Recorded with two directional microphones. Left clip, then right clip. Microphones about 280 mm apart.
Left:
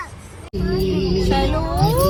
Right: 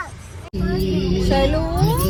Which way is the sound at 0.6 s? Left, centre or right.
Centre.